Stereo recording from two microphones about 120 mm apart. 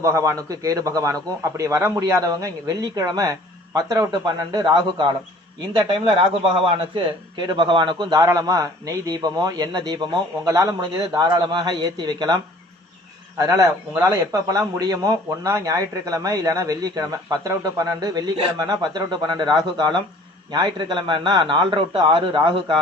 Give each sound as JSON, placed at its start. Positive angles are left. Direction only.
{"t": 0.0, "sound": "a man's voice", "side_deg": -25}
{"t": 6.4, "sound": "a man's voice", "side_deg": -50}